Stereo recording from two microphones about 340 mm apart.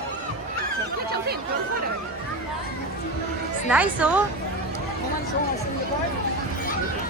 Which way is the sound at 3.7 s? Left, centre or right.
Centre.